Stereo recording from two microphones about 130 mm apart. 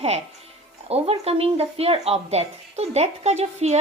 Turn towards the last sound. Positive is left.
turn(degrees=-60)  # may be behind; listen again after turning